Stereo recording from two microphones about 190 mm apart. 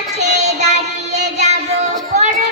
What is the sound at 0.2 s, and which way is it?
Child singing, 35° right (ahead or behind).